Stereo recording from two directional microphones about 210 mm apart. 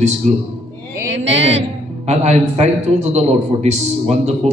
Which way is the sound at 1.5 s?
30° right (ahead or behind).